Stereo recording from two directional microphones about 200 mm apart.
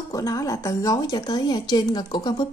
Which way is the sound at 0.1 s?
15° left (ahead or behind).